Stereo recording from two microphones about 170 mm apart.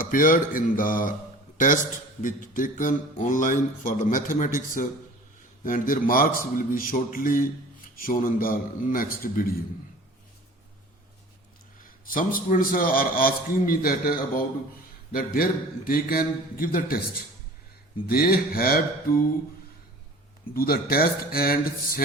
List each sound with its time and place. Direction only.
0.0 s a sound: 55° left (ahead or behind)
1.5 s a man's voice: 50° left (ahead or behind)
2.2 s a sound: 50° left (ahead or behind)
5.6 s a man's voice: 55° left (ahead or behind)
11.8 s a man's voice: 55° left (ahead or behind)
20.5 s a man's voice: 60° left (ahead or behind)